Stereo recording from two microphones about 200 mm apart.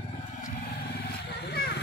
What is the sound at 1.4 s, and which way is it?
Vehicle, 55° left (ahead or behind).